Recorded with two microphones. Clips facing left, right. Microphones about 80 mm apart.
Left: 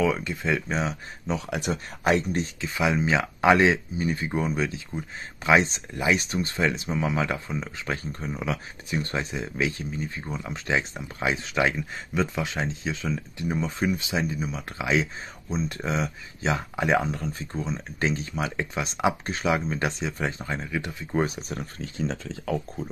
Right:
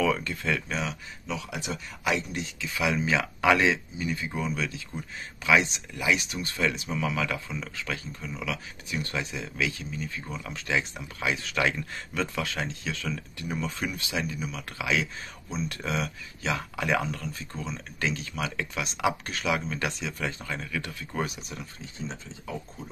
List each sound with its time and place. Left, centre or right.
0.0 s speech: centre
0.7 s speech: left
1.5 s speech: left
21.4 s speech: left
21.7 s speech: left